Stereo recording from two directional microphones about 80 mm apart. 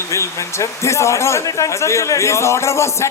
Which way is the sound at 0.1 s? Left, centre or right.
Left.